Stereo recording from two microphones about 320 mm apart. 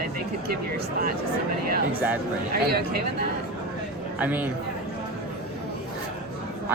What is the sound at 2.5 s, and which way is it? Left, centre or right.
Speech, right.